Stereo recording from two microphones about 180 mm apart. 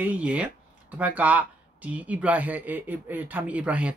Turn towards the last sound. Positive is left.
turn(degrees=-5)  # may be behind; listen again after turning